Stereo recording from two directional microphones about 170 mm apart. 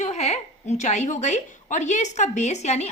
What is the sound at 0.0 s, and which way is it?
A woman's voice, 40° left (ahead or behind).